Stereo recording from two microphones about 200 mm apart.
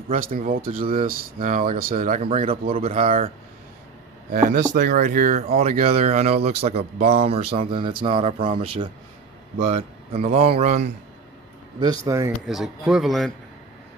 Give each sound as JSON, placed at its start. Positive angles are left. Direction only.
{"t": 0.1, "sound": "speech", "side_deg": -45}
{"t": 11.8, "sound": "speech", "side_deg": -20}
{"t": 12.5, "sound": "speech", "side_deg": 0}